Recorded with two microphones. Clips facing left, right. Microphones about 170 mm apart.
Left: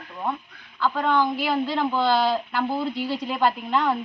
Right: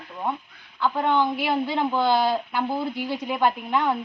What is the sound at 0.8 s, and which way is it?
A woman's voice, 20° right (ahead or behind).